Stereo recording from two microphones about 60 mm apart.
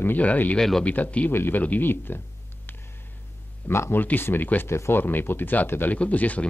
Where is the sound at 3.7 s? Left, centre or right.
Left.